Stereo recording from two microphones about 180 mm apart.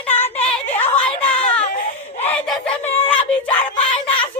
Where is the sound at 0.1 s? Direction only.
10° left (ahead or behind).